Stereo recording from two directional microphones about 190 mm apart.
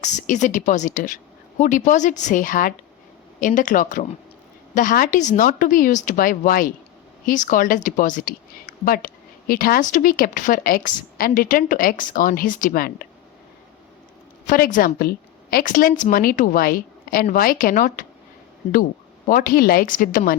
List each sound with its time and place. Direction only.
0.0 s a woman's voice: 40° left (ahead or behind)
14.4 s a woman's voice: 45° left (ahead or behind)
19.3 s a woman's voice: 50° left (ahead or behind)